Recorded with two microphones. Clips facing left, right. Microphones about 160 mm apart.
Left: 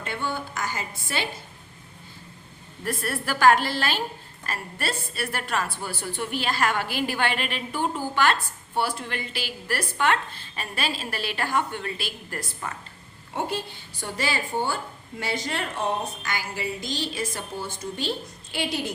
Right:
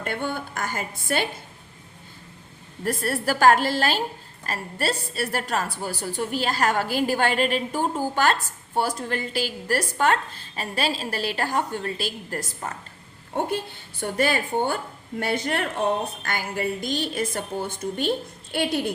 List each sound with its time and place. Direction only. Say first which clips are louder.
0.0 s a woman's voice: right 2 dB; 55° right (ahead or behind)
2.8 s a woman's voice: right 4 dB; 40° right (ahead or behind)
13.3 s a woman's voice: right 3 dB; 55° right (ahead or behind)